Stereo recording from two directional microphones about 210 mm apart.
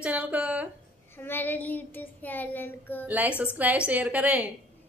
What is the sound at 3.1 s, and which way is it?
A woman's voice, 10° right (ahead or behind).